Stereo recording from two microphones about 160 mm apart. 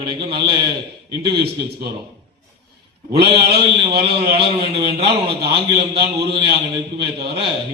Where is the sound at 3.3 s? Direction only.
35° right (ahead or behind).